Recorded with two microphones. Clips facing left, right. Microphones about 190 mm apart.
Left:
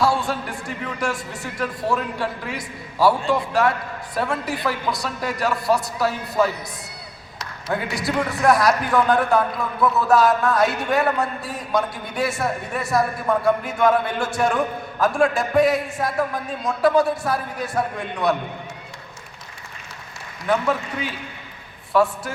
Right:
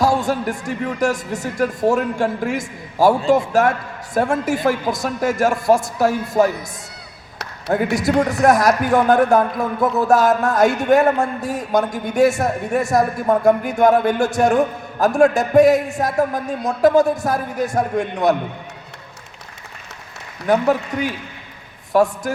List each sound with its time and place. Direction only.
0.0 s a man's voice: 45° right (ahead or behind)
7.9 s a man's voice: 45° right (ahead or behind)
20.5 s a man's voice: 45° right (ahead or behind)